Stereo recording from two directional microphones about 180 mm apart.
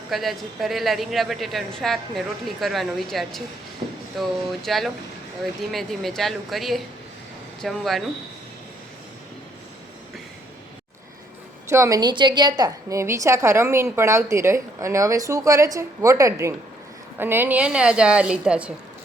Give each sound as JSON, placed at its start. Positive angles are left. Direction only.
{"t": 0.1, "sound": "a woman's voice", "side_deg": 0}
{"t": 11.7, "sound": "a woman's voice", "side_deg": -15}